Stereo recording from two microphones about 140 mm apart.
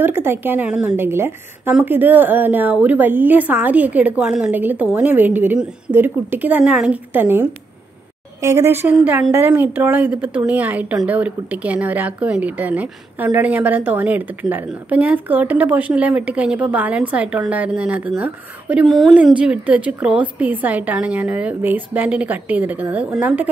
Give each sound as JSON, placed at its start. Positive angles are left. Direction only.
{"t": 0.0, "sound": "speech", "side_deg": -15}